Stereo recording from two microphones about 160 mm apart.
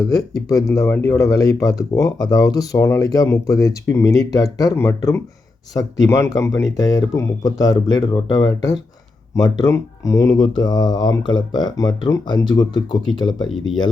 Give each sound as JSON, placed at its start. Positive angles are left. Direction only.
{"t": 0.0, "sound": "speech", "side_deg": 25}